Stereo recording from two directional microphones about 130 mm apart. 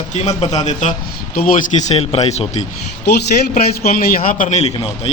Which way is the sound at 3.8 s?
90° left.